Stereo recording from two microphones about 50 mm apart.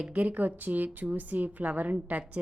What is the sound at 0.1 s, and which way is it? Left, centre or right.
A woman's voice, right.